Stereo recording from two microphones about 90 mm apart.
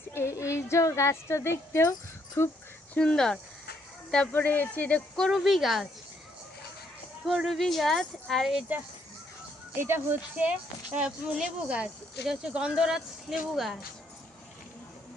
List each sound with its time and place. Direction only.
0.1 s speech: 30° left (ahead or behind)
1.9 s a sound: 35° left (ahead or behind)
2.9 s speech: 10° left (ahead or behind)
4.3 s speech: 20° left (ahead or behind)
5.1 s speech: centre (ahead or behind)
7.3 s speech: centre (ahead or behind)
9.7 s speech: 25° right (ahead or behind)
10.9 s speech: 10° right (ahead or behind)